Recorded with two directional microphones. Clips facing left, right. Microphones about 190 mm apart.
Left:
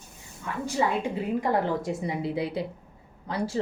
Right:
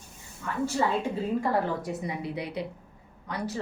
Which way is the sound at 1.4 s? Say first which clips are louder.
Left 2 dB; 25° left (ahead or behind).